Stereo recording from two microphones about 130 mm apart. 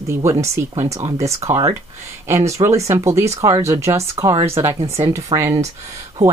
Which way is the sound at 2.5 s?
25° right (ahead or behind).